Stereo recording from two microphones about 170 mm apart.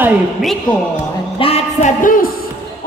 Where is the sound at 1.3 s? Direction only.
35° left (ahead or behind); by 2.3 s 50° left (ahead or behind).